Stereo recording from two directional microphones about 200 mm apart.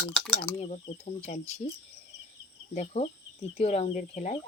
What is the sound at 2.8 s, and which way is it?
Speech, 35° left (ahead or behind).